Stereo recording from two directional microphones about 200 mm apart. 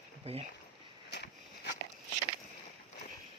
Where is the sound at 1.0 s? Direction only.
55° left (ahead or behind).